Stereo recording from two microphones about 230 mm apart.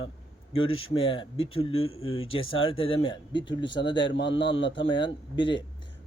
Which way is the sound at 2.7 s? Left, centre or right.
Left.